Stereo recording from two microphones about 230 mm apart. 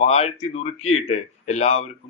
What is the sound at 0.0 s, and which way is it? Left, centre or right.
Speech, left.